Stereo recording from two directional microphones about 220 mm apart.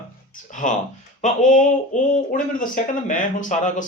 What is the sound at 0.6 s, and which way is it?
Speech, 35° left (ahead or behind).